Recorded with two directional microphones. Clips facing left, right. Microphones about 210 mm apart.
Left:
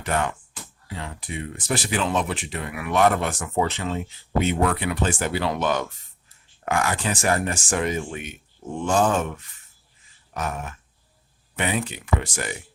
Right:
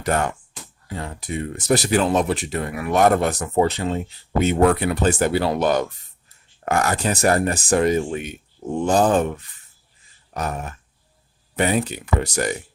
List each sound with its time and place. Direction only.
0.0 s speech: 45° right (ahead or behind)